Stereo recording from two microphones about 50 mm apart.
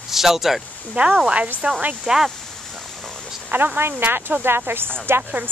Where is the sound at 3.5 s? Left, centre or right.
Right.